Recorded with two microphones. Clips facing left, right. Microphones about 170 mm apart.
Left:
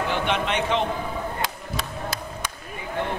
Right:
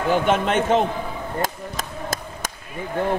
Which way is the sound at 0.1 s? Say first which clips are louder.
Right 10 dB; 45° right (ahead or behind).